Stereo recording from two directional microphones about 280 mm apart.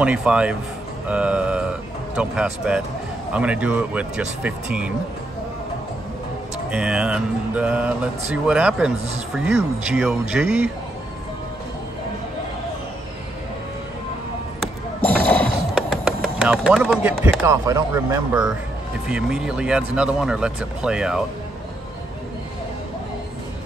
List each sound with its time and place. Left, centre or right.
0.0 s speech: centre
6.7 s speech: centre
14.6 s a sound: centre
19.0 s speech: centre